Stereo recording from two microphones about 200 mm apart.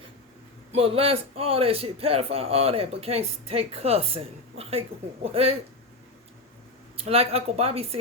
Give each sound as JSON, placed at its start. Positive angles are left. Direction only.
{"t": 0.7, "sound": "a man's voice", "side_deg": -30}
{"t": 6.9, "sound": "a man's voice", "side_deg": -30}